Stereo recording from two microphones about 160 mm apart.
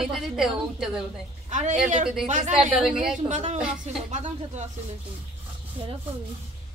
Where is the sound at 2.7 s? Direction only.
5° right (ahead or behind).